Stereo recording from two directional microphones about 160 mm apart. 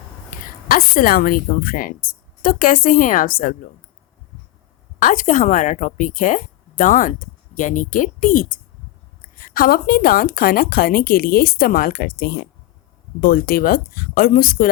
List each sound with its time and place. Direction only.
0.3 s speech: 60° left (ahead or behind)
4.9 s a woman's voice: 55° left (ahead or behind)